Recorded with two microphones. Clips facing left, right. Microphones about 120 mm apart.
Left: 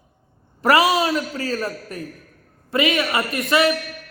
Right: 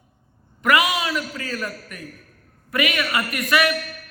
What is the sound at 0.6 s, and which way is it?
Speech, 35° left (ahead or behind).